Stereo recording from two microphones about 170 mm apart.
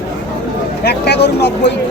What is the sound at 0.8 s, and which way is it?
Speech, 75° left (ahead or behind).